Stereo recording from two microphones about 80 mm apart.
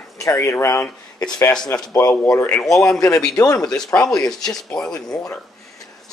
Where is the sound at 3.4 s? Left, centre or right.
Left.